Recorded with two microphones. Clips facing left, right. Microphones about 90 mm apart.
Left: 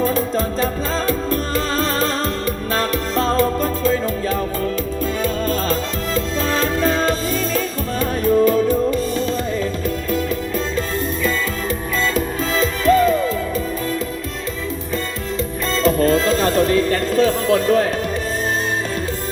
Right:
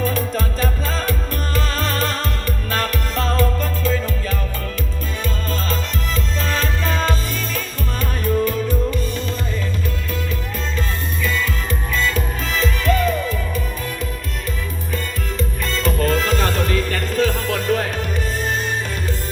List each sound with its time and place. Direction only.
0.0 s music: 30° left (ahead or behind)
7.1 s music: 35° left (ahead or behind)
12.1 s music: 35° left (ahead or behind)
15.7 s music: 35° left (ahead or behind)